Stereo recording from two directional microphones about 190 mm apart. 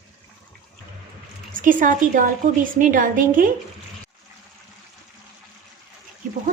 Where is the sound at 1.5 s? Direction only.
45° right (ahead or behind).